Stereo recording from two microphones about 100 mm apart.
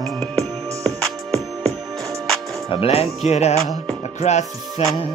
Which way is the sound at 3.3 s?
90° left.